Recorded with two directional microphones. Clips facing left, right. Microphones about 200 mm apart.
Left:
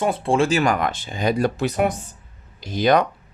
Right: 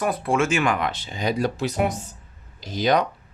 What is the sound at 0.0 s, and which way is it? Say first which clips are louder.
Speech: left 3 dB; 25° left (ahead or behind).